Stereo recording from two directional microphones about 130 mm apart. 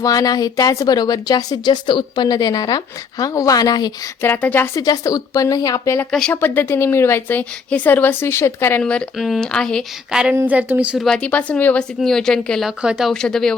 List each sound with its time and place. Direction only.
0.0 s speech: 30° left (ahead or behind)
4.2 s speech: 15° left (ahead or behind)
6.1 s speech: 5° left (ahead or behind)
6.3 s a woman's voice: 15° left (ahead or behind)
8.8 s speech: 5° left (ahead or behind)
10.3 s a woman's voice: 10° right (ahead or behind)
10.9 s a woman's voice: 5° left (ahead or behind)